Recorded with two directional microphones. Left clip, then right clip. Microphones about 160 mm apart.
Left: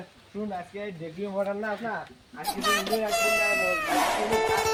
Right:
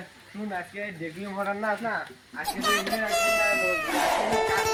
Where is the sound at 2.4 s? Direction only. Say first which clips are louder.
Even; centre (ahead or behind).